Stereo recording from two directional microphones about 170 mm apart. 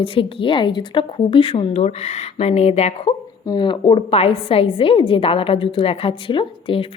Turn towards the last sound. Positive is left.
turn(degrees=30)  # may be behind; listen again after turning